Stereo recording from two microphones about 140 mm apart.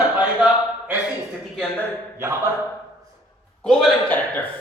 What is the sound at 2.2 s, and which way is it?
Speech, 20° right (ahead or behind).